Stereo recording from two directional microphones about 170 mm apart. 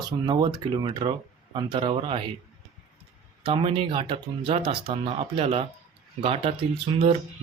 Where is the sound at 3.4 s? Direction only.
35° right (ahead or behind).